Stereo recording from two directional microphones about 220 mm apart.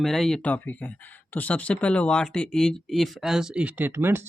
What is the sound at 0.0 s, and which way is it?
Speech, centre (ahead or behind).